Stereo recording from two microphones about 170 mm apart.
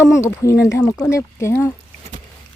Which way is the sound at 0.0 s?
15° left (ahead or behind).